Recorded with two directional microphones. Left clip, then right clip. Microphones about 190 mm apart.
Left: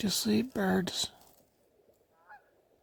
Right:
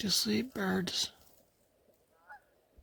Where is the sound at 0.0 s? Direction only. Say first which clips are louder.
Left 1 dB; 35° left (ahead or behind).